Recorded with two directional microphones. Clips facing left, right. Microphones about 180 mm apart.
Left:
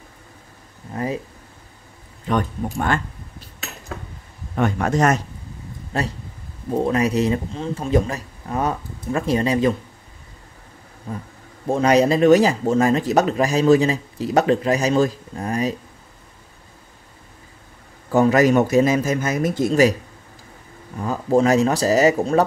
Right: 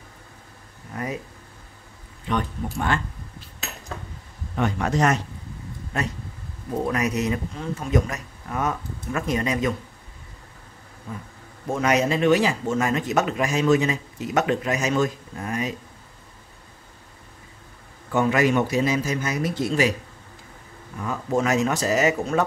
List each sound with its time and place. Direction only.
0.9 s a sound: 30° left (ahead or behind)
2.2 s a man's voice: 45° left (ahead or behind)
4.6 s a man's voice: 50° left (ahead or behind)
5.9 s speech: 30° left (ahead or behind)
11.6 s speech: 30° left (ahead or behind)
18.1 s a man's voice: 40° left (ahead or behind)
21.0 s speech: 35° left (ahead or behind)